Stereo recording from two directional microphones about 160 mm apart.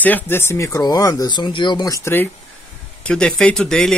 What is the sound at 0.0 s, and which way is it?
Speech, 10° left (ahead or behind).